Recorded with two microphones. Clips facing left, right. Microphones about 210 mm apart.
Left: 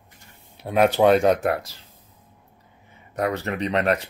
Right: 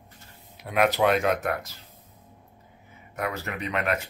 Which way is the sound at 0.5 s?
30° left (ahead or behind).